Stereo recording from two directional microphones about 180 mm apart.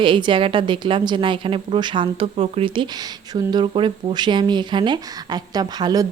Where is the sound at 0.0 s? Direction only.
25° right (ahead or behind).